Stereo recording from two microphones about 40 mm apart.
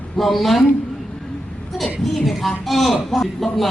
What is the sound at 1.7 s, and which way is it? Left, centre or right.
A woman's voice, centre.